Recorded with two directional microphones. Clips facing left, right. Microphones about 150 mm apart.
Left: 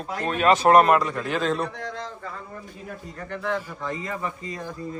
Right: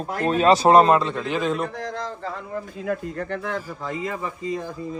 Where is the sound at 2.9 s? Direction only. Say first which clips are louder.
Right 9 dB; 60° right (ahead or behind).